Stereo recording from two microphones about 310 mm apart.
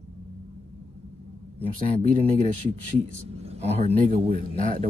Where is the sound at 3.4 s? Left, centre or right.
Centre.